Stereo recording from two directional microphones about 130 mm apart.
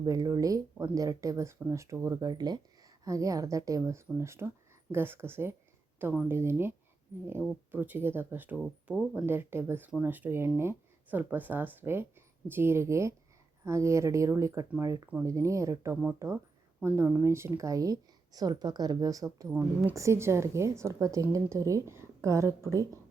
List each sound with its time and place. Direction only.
0.0 s speech: 30° right (ahead or behind)